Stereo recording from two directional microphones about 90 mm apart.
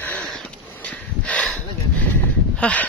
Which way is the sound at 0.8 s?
15° left (ahead or behind).